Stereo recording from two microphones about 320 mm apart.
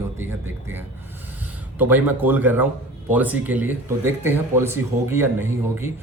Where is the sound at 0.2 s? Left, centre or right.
Centre.